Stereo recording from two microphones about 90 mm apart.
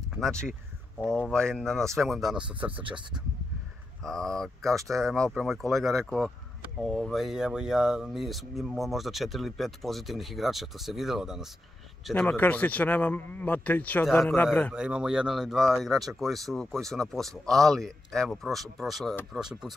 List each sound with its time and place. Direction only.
0.2 s a man's voice: 10° left (ahead or behind)
2.7 s speech: 70° right (ahead or behind)
4.0 s speech: 5° left (ahead or behind)
12.1 s a man's voice: 15° left (ahead or behind)
14.7 s speech: 10° right (ahead or behind)